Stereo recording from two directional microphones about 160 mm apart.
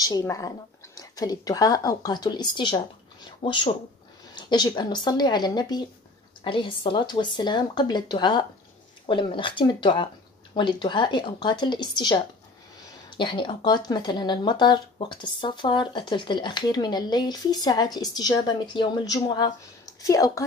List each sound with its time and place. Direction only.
0.0 s speech: 20° left (ahead or behind)
13.2 s speech: 30° left (ahead or behind)